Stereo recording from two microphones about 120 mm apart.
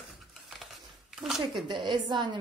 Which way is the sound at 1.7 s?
40° right (ahead or behind).